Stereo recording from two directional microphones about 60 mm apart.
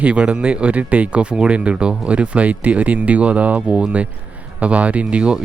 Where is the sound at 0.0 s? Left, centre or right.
Right.